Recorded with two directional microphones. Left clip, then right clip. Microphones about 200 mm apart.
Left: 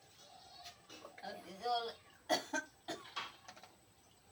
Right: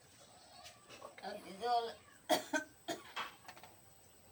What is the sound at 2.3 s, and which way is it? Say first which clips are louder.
Cough: right 2 dB; centre (ahead or behind).